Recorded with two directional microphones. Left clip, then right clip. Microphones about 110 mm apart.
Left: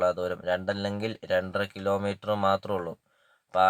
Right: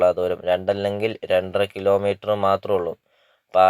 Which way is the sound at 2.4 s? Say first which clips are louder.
Right 6 dB; 20° right (ahead or behind).